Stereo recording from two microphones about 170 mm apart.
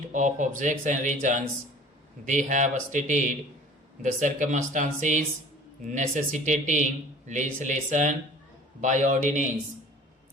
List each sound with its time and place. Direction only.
0.1 s speech: 45° right (ahead or behind)